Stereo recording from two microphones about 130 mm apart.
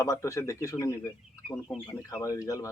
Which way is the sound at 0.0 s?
25° left (ahead or behind).